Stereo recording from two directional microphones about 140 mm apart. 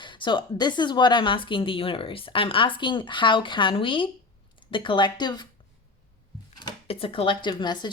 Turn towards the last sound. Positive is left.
turn(degrees=30)  # may be behind; listen again after turning